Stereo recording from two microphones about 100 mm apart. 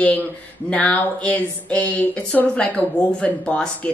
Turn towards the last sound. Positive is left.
turn(degrees=15)  # may be behind; listen again after turning